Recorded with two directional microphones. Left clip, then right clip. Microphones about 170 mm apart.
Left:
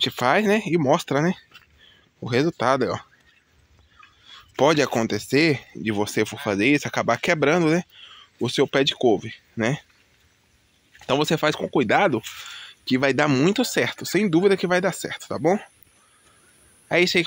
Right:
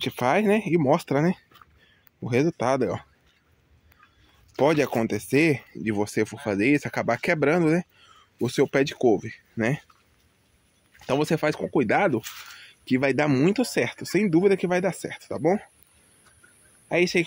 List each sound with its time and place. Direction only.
0.0 s speech: 5° right (ahead or behind)
4.6 s speech: 5° left (ahead or behind)
11.1 s speech: 5° left (ahead or behind)
16.9 s speech: 5° right (ahead or behind)